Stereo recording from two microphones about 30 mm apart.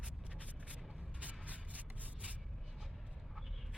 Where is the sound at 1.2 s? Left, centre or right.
Right.